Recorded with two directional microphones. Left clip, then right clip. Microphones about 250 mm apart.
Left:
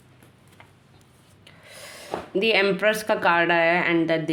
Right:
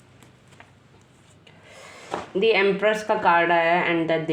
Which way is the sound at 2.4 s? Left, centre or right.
Left.